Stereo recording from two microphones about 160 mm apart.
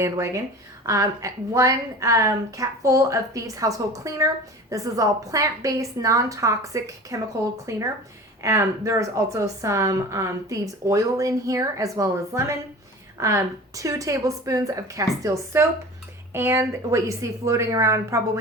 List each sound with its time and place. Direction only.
0.9 s a woman's voice: 20° right (ahead or behind)